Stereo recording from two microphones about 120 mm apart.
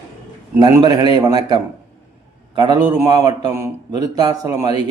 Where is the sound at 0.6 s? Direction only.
35° right (ahead or behind).